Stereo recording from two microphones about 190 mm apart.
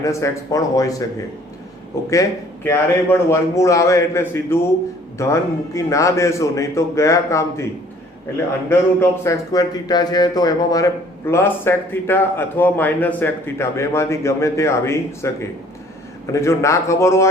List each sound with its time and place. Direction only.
0.0 s speech: 15° left (ahead or behind)
8.7 s speech: 15° left (ahead or behind)